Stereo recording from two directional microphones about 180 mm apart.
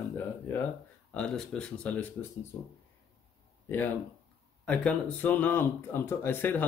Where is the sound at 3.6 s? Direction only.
10° left (ahead or behind).